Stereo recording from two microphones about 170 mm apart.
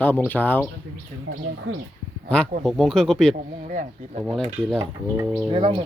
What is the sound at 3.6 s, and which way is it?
Speech, 50° right (ahead or behind).